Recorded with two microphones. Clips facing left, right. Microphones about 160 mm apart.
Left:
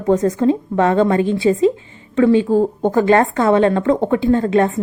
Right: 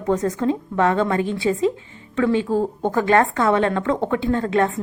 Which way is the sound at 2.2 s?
15° left (ahead or behind).